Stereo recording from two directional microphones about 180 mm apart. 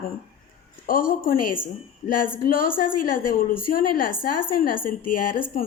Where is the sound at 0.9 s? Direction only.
50° left (ahead or behind).